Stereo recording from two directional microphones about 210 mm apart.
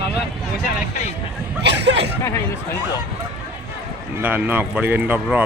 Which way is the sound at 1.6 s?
55° right (ahead or behind).